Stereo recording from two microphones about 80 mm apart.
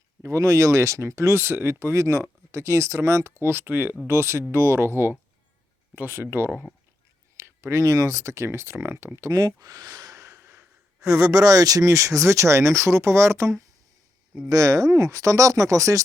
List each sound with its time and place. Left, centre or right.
0.2 s speech: right
7.3 s speech: right
9.3 s speech: right
10.3 s sigh: right
11.1 s speech: right